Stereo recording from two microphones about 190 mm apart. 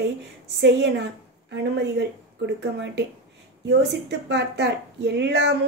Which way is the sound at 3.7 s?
65° right (ahead or behind).